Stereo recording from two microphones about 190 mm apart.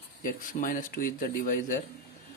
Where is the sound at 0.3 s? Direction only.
45° left (ahead or behind).